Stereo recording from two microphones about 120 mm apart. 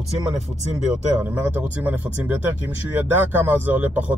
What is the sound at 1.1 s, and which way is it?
Speech, 15° right (ahead or behind).